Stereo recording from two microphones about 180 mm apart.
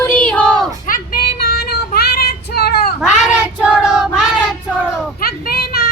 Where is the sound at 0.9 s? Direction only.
55° left (ahead or behind).